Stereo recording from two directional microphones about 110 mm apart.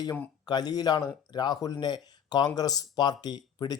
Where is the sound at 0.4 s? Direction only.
35° left (ahead or behind).